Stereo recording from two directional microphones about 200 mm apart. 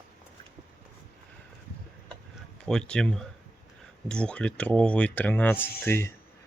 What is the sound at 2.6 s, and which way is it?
Speech, 5° left (ahead or behind).